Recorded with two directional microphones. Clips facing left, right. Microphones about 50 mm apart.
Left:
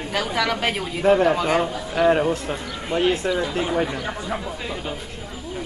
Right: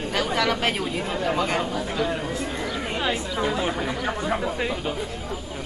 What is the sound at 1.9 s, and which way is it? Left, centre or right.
Speech, left.